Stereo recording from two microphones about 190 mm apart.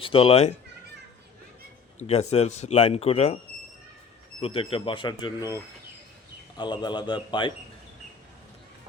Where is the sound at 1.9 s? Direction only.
35° left (ahead or behind).